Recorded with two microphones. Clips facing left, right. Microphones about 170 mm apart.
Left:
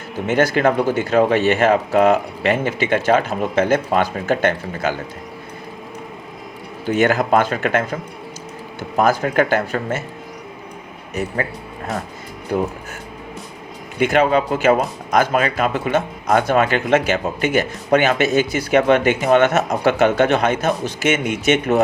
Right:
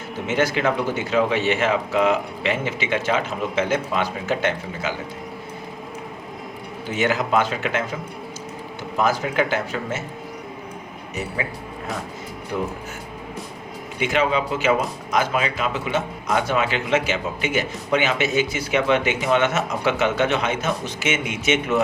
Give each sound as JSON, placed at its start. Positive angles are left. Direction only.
{"t": 0.3, "sound": "speech", "side_deg": 45}
{"t": 6.9, "sound": "speech", "side_deg": 55}
{"t": 9.0, "sound": "speech", "side_deg": 50}
{"t": 12.5, "sound": "speech", "side_deg": 40}
{"t": 14.0, "sound": "speech", "side_deg": 50}
{"t": 20.6, "sound": "speech", "side_deg": 40}